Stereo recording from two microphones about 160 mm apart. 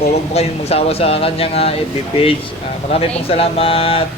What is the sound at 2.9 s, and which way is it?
A man's voice, 40° left (ahead or behind).